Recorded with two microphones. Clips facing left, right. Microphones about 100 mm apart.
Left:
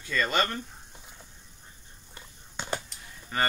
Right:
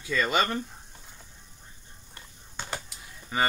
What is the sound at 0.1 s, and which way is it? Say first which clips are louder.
Speech: right 2 dB; 5° right (ahead or behind).